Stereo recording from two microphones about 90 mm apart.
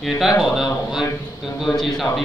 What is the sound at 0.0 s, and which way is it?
Speech, centre (ahead or behind).